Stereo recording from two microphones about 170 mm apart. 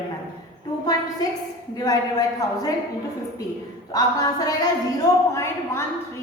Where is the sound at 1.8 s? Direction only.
20° left (ahead or behind).